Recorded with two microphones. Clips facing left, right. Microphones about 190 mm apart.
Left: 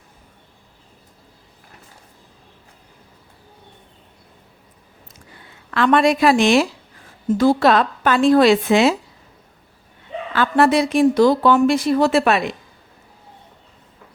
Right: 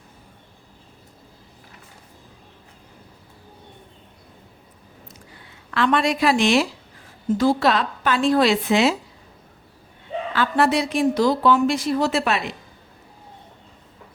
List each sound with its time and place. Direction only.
5.7 s speech: 50° left (ahead or behind)
10.3 s speech: 50° left (ahead or behind)